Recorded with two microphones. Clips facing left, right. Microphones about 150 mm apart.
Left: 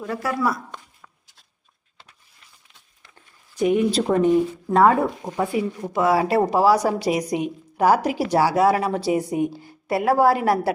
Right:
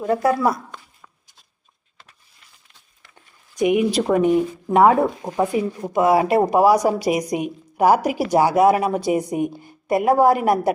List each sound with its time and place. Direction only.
0.0 s speech: 25° right (ahead or behind)
3.5 s a woman's voice: 15° right (ahead or behind)